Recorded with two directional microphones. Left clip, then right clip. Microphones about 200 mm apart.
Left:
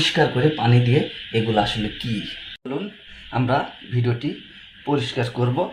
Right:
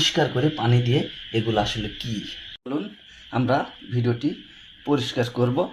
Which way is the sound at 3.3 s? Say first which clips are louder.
Left 1 dB; 30° right (ahead or behind).